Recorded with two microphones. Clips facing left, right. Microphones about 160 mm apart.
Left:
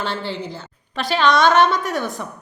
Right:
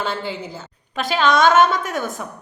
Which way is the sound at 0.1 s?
5° right (ahead or behind).